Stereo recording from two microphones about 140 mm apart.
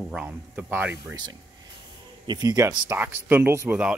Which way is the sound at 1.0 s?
30° right (ahead or behind).